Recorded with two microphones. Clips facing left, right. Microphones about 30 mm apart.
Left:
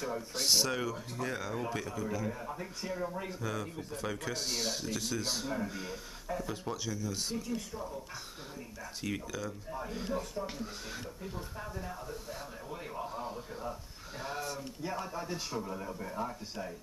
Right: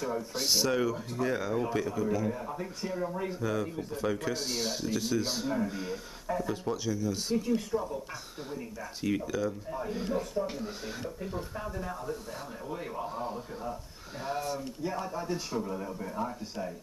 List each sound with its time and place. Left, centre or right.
0.0 s speech: centre
7.4 s speech: right
9.2 s speech: centre